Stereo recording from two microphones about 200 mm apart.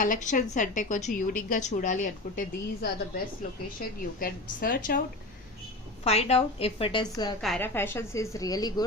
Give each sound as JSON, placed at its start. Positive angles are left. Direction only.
{"t": 0.0, "sound": "a woman's voice", "side_deg": 40}
{"t": 6.1, "sound": "a woman's voice", "side_deg": 30}
{"t": 7.4, "sound": "a woman's voice", "side_deg": 5}